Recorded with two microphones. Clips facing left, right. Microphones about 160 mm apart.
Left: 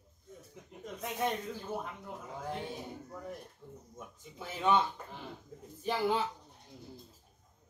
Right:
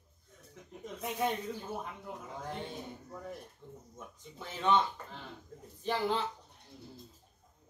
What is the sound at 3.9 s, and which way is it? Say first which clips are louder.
Speech: even; 10° left (ahead or behind).